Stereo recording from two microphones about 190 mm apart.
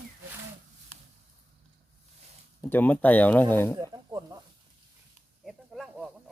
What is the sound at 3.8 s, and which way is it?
Snake, 20° right (ahead or behind).